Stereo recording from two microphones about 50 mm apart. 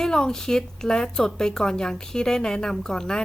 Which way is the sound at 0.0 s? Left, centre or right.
Centre.